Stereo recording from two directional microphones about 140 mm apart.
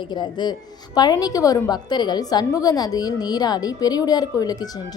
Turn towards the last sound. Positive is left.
turn(degrees=30)  # may be behind; listen again after turning